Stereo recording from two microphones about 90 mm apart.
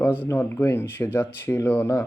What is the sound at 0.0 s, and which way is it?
Speech, 20° left (ahead or behind).